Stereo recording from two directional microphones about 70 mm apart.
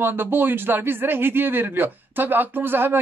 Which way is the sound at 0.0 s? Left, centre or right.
Right.